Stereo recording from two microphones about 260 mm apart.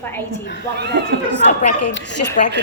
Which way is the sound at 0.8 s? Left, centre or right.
Right.